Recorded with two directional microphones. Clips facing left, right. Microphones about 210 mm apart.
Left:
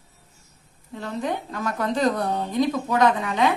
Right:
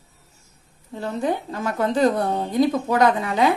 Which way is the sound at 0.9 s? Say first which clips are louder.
Right 4 dB; 35° right (ahead or behind).